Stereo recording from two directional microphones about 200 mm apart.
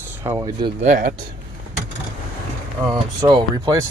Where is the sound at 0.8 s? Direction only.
40° right (ahead or behind).